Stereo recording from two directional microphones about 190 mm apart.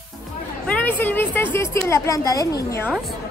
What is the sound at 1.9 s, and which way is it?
Speech, 15° left (ahead or behind).